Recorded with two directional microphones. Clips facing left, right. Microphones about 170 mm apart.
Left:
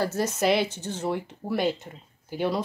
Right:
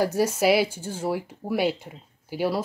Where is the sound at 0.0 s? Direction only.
10° right (ahead or behind).